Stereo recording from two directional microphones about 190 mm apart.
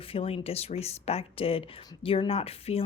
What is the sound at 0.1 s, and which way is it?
Speech, 30° left (ahead or behind).